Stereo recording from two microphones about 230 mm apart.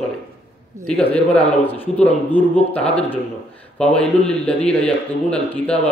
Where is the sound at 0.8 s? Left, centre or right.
Centre.